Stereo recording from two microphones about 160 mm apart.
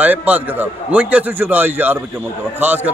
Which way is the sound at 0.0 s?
10° right (ahead or behind).